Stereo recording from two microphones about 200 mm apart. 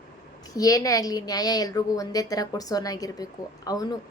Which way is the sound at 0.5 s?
15° left (ahead or behind).